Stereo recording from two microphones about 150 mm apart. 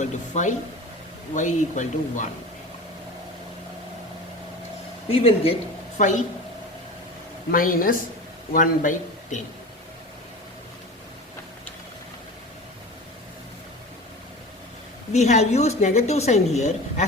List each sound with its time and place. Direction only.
0.0 s a woman's voice: 55° left (ahead or behind)
5.0 s speech: 40° left (ahead or behind)
6.0 s speech: 55° left (ahead or behind)
7.5 s a woman's voice: 65° left (ahead or behind)
15.1 s a woman's voice: 50° left (ahead or behind)